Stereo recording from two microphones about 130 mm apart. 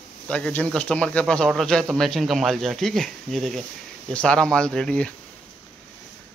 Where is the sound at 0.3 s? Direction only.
10° left (ahead or behind).